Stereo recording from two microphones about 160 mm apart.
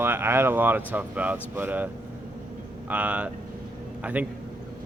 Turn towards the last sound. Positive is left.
turn(degrees=-10)  # may be behind; listen again after turning